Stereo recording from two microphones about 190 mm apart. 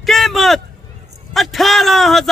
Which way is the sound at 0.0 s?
Centre (ahead or behind).